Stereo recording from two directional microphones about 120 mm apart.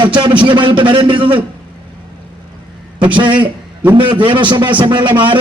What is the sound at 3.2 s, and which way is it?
A man's voice, 40° right (ahead or behind).